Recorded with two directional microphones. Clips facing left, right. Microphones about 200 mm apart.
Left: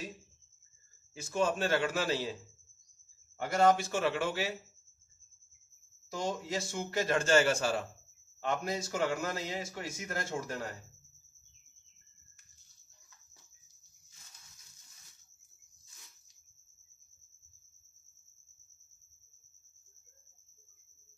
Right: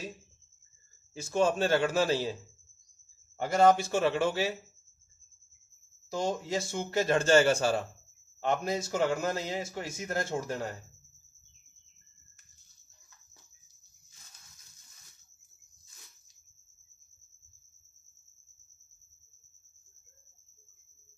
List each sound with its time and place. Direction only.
1.1 s a man's voice: 30° right (ahead or behind)
3.3 s speech: 30° right (ahead or behind)
6.0 s speech: 25° right (ahead or behind)